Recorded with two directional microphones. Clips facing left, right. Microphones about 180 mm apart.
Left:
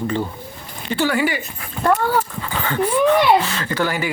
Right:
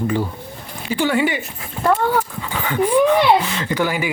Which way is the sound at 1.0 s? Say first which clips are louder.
Right 2 dB; 20° right (ahead or behind).